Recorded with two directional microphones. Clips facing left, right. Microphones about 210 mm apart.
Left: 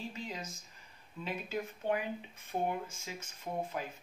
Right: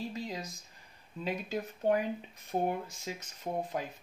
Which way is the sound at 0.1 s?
40° right (ahead or behind).